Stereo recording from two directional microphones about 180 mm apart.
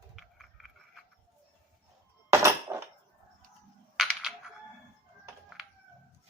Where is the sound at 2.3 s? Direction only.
15° right (ahead or behind).